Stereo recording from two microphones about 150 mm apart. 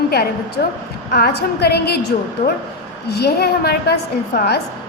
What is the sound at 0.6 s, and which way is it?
A woman's voice, 90° left.